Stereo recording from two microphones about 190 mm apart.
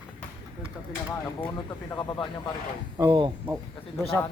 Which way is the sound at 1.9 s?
20° left (ahead or behind).